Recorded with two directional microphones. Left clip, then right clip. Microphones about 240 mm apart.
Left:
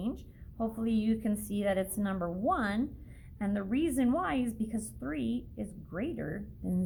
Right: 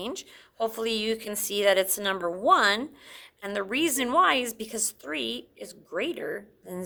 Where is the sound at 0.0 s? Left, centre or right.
Right.